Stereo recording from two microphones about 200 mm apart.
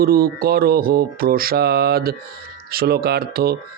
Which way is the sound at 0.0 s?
50° right (ahead or behind).